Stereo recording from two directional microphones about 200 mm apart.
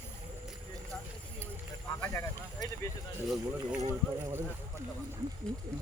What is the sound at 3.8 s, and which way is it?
Speech, 15° right (ahead or behind).